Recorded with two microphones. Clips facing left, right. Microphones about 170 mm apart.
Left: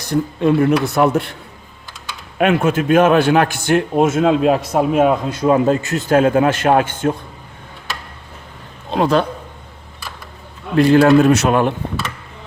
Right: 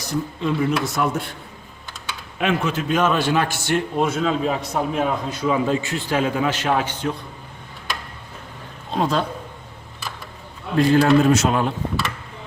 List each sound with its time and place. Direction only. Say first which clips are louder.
0.0 s a man's voice: left 8 dB; 60° left (ahead or behind)
2.4 s a man's voice: left 7 dB; 55° left (ahead or behind); by 5.1 s 85° left
5.3 s a man's voice: left 6 dB; 50° left (ahead or behind)
8.9 s a man's voice: left 6 dB; 70° left (ahead or behind)
10.8 s a man's voice: left 5 dB; 65° left (ahead or behind)